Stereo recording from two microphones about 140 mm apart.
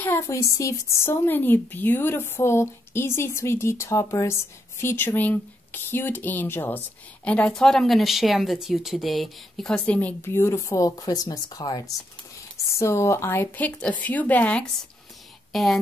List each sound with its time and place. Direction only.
0.0 s a woman's voice: 20° left (ahead or behind); by 15.8 s centre (ahead or behind)